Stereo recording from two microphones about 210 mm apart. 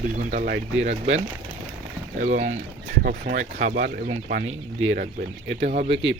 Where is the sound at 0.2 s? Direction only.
40° right (ahead or behind).